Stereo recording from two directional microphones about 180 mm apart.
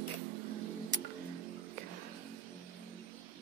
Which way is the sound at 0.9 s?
45° right (ahead or behind).